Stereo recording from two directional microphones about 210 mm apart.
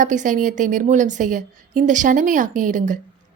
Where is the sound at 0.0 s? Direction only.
35° right (ahead or behind).